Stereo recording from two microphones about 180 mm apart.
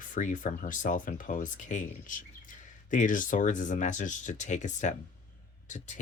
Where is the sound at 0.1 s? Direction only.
45° left (ahead or behind).